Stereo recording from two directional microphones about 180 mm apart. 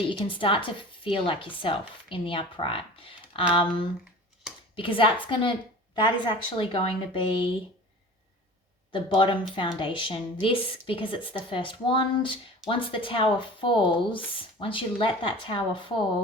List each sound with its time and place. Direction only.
0.1 s speech: 30° left (ahead or behind)
8.9 s speech: 30° left (ahead or behind)